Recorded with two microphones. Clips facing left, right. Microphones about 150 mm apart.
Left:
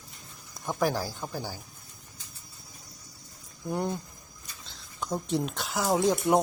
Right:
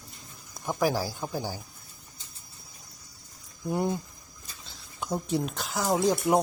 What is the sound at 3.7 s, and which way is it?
Speech, 5° right (ahead or behind).